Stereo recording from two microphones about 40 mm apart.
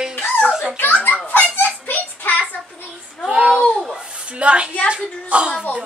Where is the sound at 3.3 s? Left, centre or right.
Right.